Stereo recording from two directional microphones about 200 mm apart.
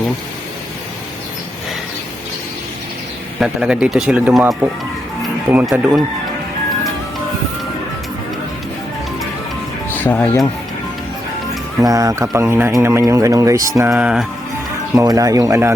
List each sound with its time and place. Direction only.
3.4 s speech: 5° right (ahead or behind)
9.9 s speech: 10° left (ahead or behind)
11.8 s speech: 15° right (ahead or behind)
14.9 s speech: 15° right (ahead or behind)